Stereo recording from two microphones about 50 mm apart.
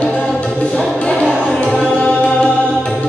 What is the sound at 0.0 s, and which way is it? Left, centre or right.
Music, left.